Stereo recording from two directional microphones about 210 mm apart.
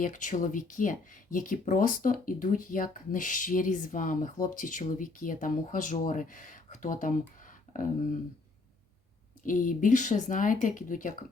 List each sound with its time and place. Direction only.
0.0 s speech: 35° left (ahead or behind)
9.8 s speech: 35° left (ahead or behind)